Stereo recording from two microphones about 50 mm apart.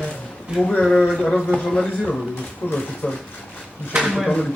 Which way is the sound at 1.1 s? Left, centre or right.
Centre.